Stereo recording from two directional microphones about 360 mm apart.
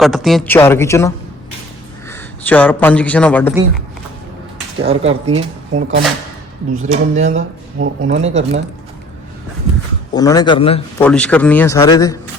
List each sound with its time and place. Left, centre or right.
0.0 s a man's voice: centre
4.8 s speech: centre
10.2 s speech: centre
11.0 s a man's voice: centre